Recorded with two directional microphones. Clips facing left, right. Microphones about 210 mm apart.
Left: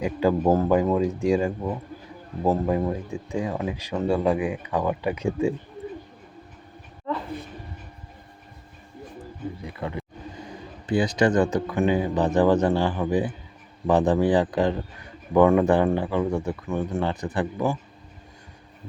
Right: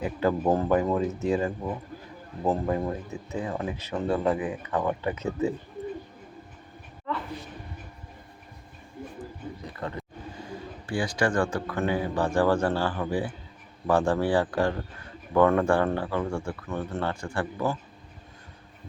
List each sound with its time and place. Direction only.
0.0 s a man's voice: 10° left (ahead or behind)
9.6 s speech: 10° left (ahead or behind)